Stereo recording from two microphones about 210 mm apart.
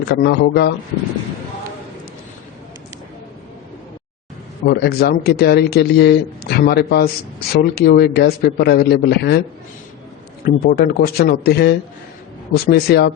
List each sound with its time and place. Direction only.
0.1 s a man's voice: 55° left (ahead or behind)
4.6 s a man's voice: 50° left (ahead or behind)
10.4 s a man's voice: 45° left (ahead or behind)